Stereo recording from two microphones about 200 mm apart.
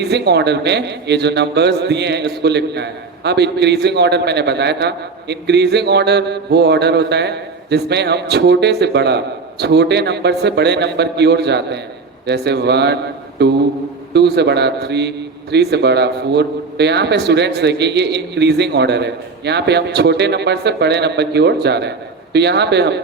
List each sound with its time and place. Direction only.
0.0 s a man's voice: 55° right (ahead or behind)